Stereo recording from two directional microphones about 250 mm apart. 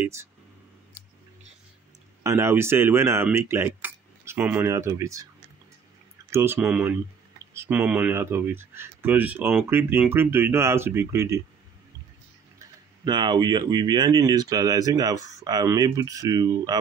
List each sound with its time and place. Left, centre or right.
0.0 s speech: centre
2.2 s speech: centre
6.3 s speech: centre
13.0 s speech: centre